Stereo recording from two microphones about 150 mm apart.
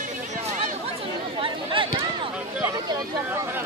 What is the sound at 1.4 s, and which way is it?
Chatter, 35° right (ahead or behind).